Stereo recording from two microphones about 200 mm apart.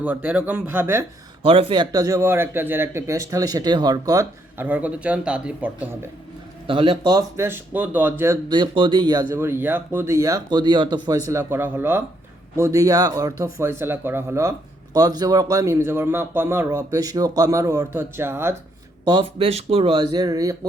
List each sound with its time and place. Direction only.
0.0 s a man's voice: 10° right (ahead or behind)
1.4 s a man's voice: 25° right (ahead or behind); by 6.1 s 10° right (ahead or behind)
6.7 s a man's voice: 25° right (ahead or behind)
19.0 s speech: 25° right (ahead or behind)